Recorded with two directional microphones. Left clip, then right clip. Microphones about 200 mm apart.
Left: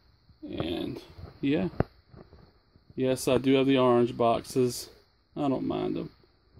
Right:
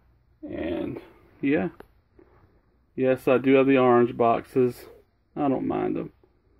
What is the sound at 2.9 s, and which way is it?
Speech, 20° left (ahead or behind).